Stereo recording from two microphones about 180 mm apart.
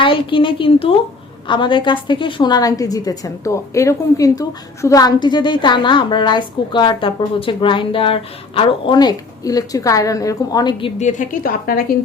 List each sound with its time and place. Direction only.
0.0 s a woman's voice: 30° left (ahead or behind)
11.0 s a woman's voice: 45° left (ahead or behind)